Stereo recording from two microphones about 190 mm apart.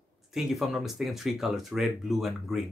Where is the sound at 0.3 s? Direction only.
Centre (ahead or behind).